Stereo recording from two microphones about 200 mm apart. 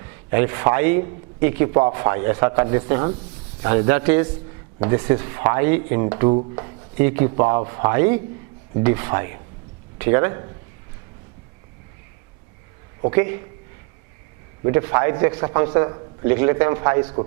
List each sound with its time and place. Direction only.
0.3 s a man's voice: 15° right (ahead or behind)
13.0 s a man's voice: 20° right (ahead or behind)
14.6 s a man's voice: 15° right (ahead or behind)